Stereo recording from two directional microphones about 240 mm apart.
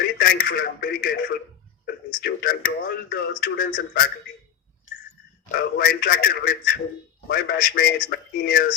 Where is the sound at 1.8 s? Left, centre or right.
Left.